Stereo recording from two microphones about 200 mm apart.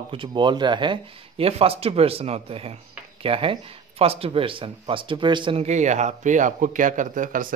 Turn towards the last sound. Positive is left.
turn(degrees=-40)  # may be behind; listen again after turning